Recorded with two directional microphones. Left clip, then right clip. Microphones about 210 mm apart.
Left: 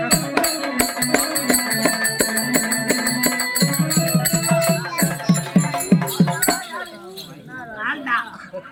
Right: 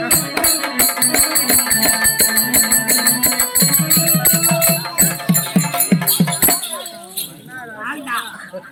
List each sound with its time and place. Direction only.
0.1 s music: 10° left (ahead or behind)
6.5 s chink: 5° left (ahead or behind)
7.8 s a sound: 50° left (ahead or behind)